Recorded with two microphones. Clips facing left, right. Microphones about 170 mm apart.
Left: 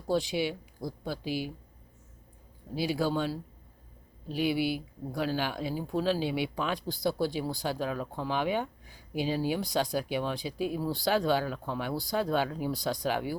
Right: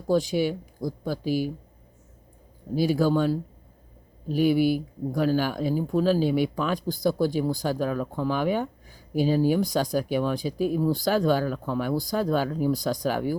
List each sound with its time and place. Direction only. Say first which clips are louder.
0.1 s speech: right 6 dB; 45° right (ahead or behind)
2.7 s speech: right 7 dB; 45° right (ahead or behind)